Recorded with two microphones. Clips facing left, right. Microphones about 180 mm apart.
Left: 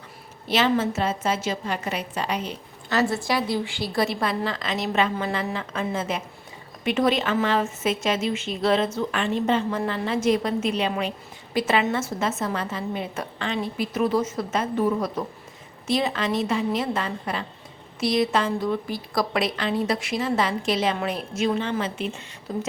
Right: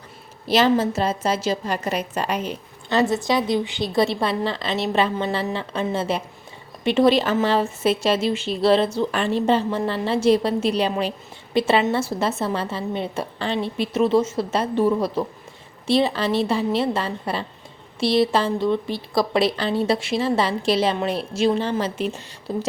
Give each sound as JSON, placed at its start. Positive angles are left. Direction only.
{"t": 0.4, "sound": "a woman's voice", "side_deg": -35}
{"t": 2.9, "sound": "a woman's voice", "side_deg": -25}